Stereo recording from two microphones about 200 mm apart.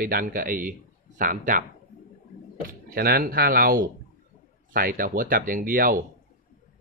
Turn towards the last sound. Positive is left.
turn(degrees=-45)  # may be behind; listen again after turning